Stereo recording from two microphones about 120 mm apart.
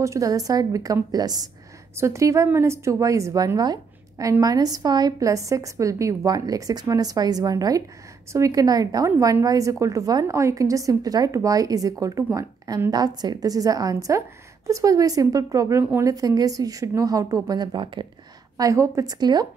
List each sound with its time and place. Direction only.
0.0 s a woman's voice: 25° right (ahead or behind)
15.8 s a woman's voice: 15° right (ahead or behind)
16.1 s a woman's voice: 30° right (ahead or behind)
18.6 s a woman's voice: 25° right (ahead or behind)